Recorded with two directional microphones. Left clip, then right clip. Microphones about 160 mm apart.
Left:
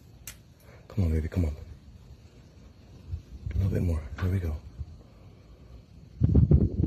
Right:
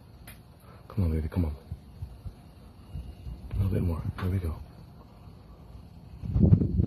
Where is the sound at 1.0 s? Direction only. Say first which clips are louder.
Left 1 dB; 30° left (ahead or behind).